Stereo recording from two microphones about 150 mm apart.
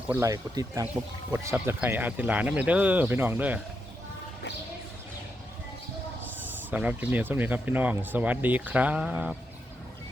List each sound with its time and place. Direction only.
0.1 s speech: 20° right (ahead or behind)
6.7 s speech: 10° right (ahead or behind)